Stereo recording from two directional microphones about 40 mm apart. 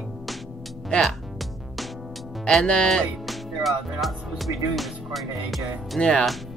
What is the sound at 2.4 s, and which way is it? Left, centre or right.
Speech, left.